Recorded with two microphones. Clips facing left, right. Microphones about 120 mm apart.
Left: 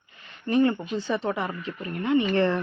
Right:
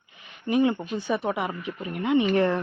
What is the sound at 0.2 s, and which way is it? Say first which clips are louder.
Speech: left 1 dB; 15° right (ahead or behind).